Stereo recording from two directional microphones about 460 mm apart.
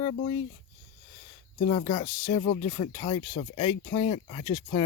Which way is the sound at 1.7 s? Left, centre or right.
Centre.